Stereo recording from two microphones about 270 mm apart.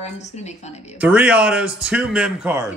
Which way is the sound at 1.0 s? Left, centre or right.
Centre.